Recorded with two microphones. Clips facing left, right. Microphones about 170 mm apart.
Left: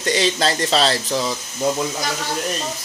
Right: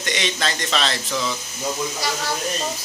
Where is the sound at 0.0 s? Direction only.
35° left (ahead or behind).